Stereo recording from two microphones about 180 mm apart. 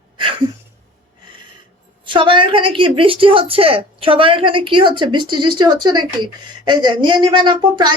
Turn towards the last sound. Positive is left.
turn(degrees=-25)  # may be behind; listen again after turning